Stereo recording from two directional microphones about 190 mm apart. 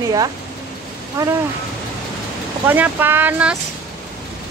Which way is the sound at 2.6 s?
10° right (ahead or behind).